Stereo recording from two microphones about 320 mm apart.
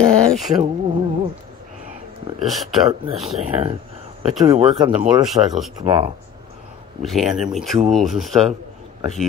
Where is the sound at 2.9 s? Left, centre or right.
Centre.